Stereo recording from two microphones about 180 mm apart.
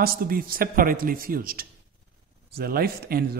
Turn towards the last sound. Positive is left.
turn(degrees=-55)  # may be behind; listen again after turning